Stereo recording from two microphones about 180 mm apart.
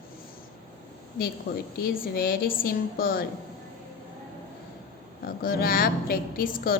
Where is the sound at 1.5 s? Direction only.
55° left (ahead or behind).